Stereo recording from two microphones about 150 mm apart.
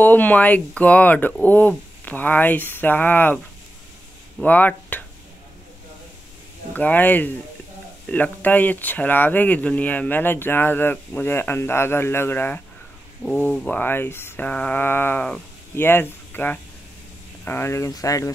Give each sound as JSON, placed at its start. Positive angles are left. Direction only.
{"t": 0.0, "sound": "speech", "side_deg": 10}
{"t": 4.4, "sound": "speech", "side_deg": 10}
{"t": 6.7, "sound": "speech", "side_deg": 10}